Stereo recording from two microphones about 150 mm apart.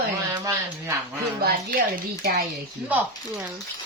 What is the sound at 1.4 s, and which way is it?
Speech, 90° right.